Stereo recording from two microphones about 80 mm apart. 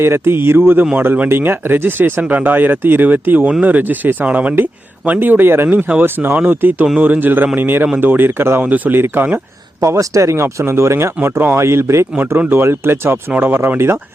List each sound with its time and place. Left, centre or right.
0.0 s speech: right
9.8 s speech: right
12.1 s speech: right